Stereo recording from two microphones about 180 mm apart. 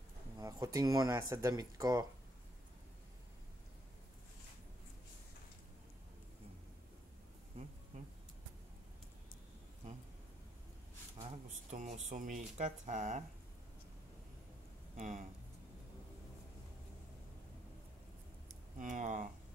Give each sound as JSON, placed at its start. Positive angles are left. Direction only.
{"t": 0.4, "sound": "speech", "side_deg": -20}
{"t": 7.5, "sound": "bee", "side_deg": -35}
{"t": 11.1, "sound": "speech", "side_deg": -35}
{"t": 15.0, "sound": "speech", "side_deg": -45}
{"t": 18.8, "sound": "speech", "side_deg": -45}